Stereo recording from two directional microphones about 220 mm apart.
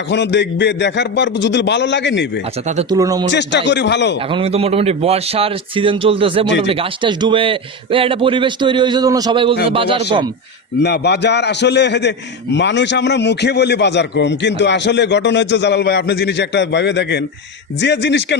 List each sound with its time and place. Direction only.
0.1 s a man's voice: 50° left (ahead or behind)
2.9 s speech: 15° right (ahead or behind)
3.3 s a man's voice: 50° left (ahead or behind)
4.3 s a man's voice: 25° right (ahead or behind)
10.8 s a man's voice: 50° left (ahead or behind)